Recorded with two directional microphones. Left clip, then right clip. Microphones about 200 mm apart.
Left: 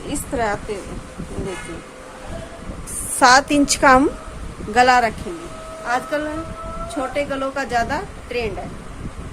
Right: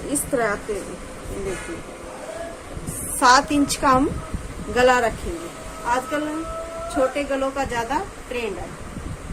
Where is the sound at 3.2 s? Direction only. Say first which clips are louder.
Left 3 dB; 50° left (ahead or behind).